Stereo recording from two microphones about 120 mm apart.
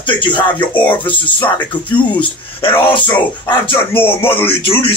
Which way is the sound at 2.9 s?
45° left (ahead or behind).